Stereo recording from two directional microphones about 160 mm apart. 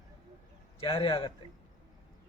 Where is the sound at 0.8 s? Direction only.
30° left (ahead or behind).